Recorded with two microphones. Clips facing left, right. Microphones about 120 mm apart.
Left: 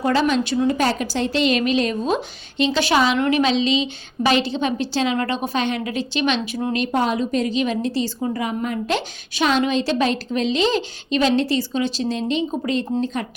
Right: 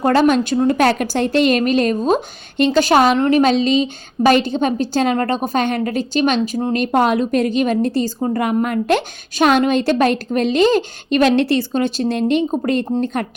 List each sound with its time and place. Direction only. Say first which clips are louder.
0.0 s a woman's voice: right 5 dB; 50° right (ahead or behind)
0.8 s a woman's voice: right 5 dB; 60° right (ahead or behind); by 6.7 s 35° right (ahead or behind)
6.7 s a woman's voice: right 5 dB; 50° right (ahead or behind)